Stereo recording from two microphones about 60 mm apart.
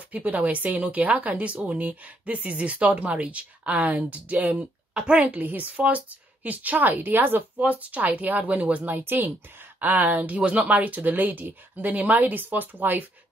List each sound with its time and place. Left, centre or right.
0.1 s a woman's voice: right